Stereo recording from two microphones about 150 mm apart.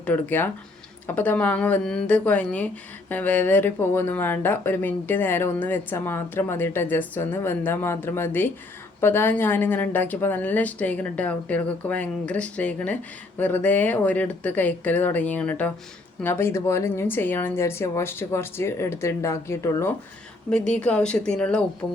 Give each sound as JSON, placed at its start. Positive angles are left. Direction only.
{"t": 0.0, "sound": "a woman's voice", "side_deg": 10}
{"t": 20.5, "sound": "a woman's voice", "side_deg": 5}